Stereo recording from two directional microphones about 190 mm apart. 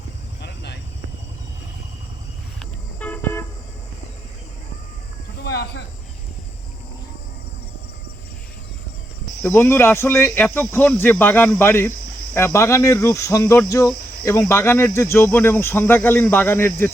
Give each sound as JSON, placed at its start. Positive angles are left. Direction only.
{"t": 0.4, "sound": "a sound", "side_deg": 60}
{"t": 3.0, "sound": "toot", "side_deg": 10}
{"t": 5.4, "sound": "cricket", "side_deg": 60}
{"t": 9.4, "sound": "speech", "side_deg": 10}